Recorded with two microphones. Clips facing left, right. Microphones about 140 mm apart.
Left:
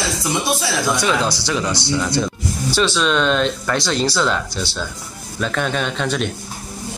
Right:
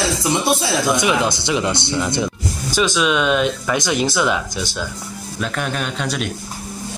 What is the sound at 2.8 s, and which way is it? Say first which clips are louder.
Speech: right 1 dB; 10° right (ahead or behind).